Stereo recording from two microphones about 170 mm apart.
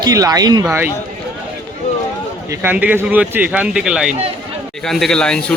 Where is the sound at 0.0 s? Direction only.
20° right (ahead or behind).